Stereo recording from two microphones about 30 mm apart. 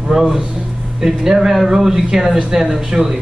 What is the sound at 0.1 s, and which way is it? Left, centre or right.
A man's voice, centre.